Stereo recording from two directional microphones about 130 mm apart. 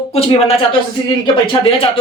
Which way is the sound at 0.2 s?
50° left (ahead or behind).